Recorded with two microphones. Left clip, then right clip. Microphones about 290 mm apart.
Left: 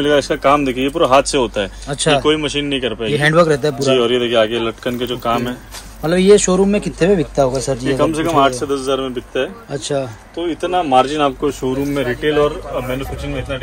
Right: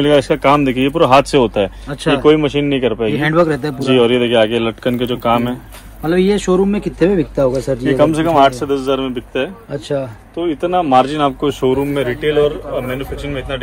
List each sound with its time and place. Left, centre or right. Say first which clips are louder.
0.0 s speech: right 2 dB; right
1.9 s a man's voice: left 1 dB; centre
2.2 s speech: right 4 dB; right
3.1 s a man's voice: left 4 dB; centre
3.8 s speech: right 5 dB; right
6.0 s a man's voice: left 3 dB; centre
7.8 s speech: right 4 dB; right
9.7 s a man's voice: even; centre
10.4 s speech: right 2 dB; right
11.9 s a man's voice: right 1 dB; centre